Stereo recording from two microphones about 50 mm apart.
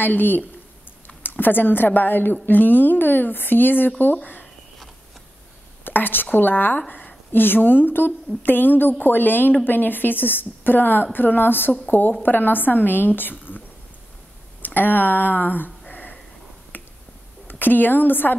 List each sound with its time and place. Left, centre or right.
0.0 s a woman's voice: left
5.9 s a woman's voice: left
14.6 s a woman's voice: left
15.9 s a sound: left
16.7 s finger snapping: left
17.5 s a woman's voice: left